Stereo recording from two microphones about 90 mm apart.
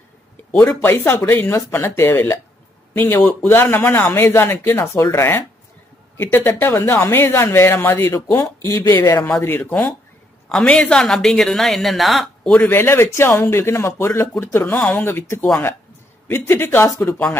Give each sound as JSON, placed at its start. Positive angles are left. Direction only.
{"t": 0.5, "sound": "speech", "side_deg": 20}
{"t": 4.7, "sound": "speech", "side_deg": 35}
{"t": 6.1, "sound": "a woman's voice", "side_deg": 20}
{"t": 12.4, "sound": "speech", "side_deg": 20}
{"t": 14.7, "sound": "speech", "side_deg": 15}